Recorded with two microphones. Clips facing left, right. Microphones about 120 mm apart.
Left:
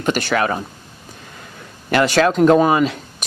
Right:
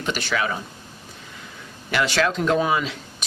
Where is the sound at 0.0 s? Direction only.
50° left (ahead or behind).